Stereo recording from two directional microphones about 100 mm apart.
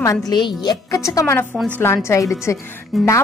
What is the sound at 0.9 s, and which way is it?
A woman's voice, 35° left (ahead or behind).